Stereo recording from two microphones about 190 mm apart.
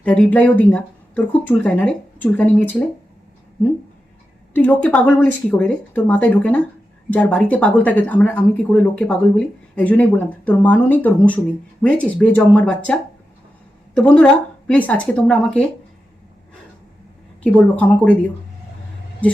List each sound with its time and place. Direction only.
0.0 s speech: 5° left (ahead or behind)
4.5 s speech: 10° left (ahead or behind)
17.4 s speech: 5° left (ahead or behind)